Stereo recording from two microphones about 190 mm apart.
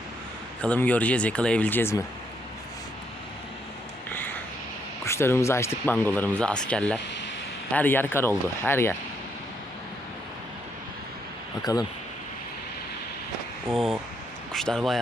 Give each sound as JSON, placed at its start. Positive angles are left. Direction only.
{"t": 0.6, "sound": "speech", "side_deg": 5}
{"t": 4.1, "sound": "a sound", "side_deg": 10}
{"t": 5.0, "sound": "speech", "side_deg": 15}
{"t": 11.6, "sound": "speech", "side_deg": 20}
{"t": 13.7, "sound": "speech", "side_deg": -5}